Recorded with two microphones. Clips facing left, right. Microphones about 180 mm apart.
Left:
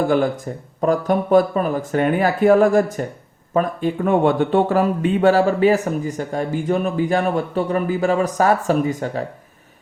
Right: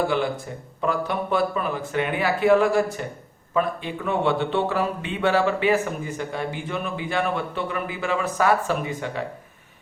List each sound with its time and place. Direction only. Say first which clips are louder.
0.8 s a man's voice: left 7 dB; 45° left (ahead or behind)